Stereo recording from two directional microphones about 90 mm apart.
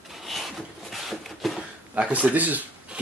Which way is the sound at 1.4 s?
Centre (ahead or behind).